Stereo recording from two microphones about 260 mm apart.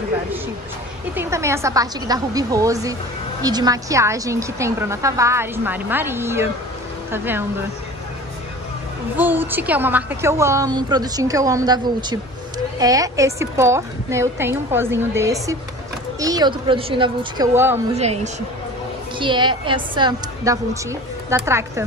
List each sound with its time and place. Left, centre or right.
1.1 s a woman's voice: centre
9.1 s a woman's voice: centre
17.9 s a woman's voice: right